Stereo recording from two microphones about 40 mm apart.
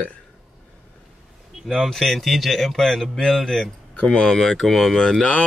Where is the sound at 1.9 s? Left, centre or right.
Centre.